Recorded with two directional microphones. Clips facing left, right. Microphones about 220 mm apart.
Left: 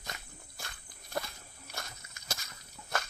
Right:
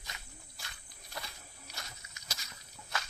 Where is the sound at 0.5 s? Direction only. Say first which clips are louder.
Left 5 dB; 50° left (ahead or behind).